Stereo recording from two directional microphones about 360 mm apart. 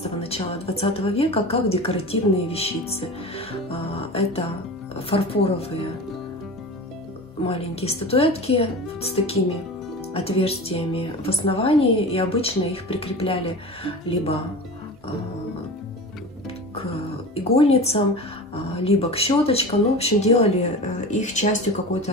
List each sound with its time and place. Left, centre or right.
0.0 s a woman's voice: centre
7.4 s a woman's voice: centre
17.3 s a woman's voice: centre